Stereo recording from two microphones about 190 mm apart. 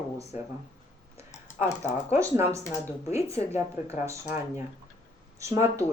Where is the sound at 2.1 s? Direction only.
15° right (ahead or behind).